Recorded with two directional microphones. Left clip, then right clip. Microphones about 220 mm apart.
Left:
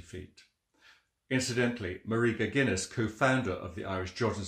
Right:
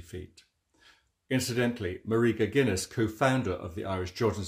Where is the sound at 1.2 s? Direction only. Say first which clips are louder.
Right 1 dB; 40° right (ahead or behind).